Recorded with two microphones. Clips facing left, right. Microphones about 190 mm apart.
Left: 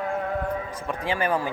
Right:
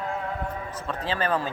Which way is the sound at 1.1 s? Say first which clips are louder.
Left 1 dB; 15° left (ahead or behind).